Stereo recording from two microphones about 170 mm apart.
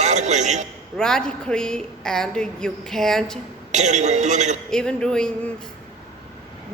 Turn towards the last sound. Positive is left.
turn(degrees=5)  # may be behind; listen again after turning